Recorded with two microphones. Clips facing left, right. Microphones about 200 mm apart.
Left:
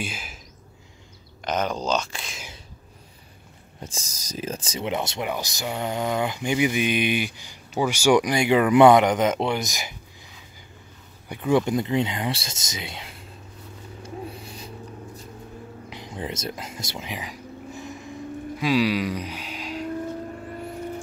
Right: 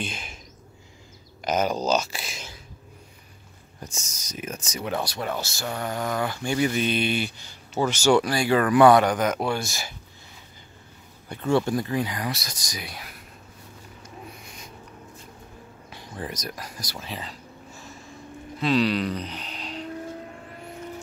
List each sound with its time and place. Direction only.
0.0 s speech: 5° left (ahead or behind)
1.4 s speech: 5° right (ahead or behind)
3.8 s speech: 30° left (ahead or behind)
11.2 s speech: 15° left (ahead or behind)
14.0 s a sound: 30° left (ahead or behind)
15.9 s a sound: 20° left (ahead or behind)
18.6 s speech: 10° left (ahead or behind)